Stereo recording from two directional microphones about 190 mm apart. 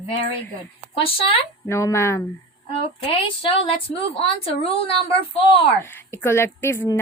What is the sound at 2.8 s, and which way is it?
A woman's voice, 25° left (ahead or behind).